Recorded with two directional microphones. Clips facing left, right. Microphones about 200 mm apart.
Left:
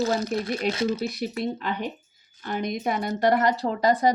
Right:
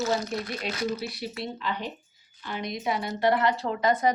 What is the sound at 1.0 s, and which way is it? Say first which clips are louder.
Speech: left 6 dB; 45° left (ahead or behind).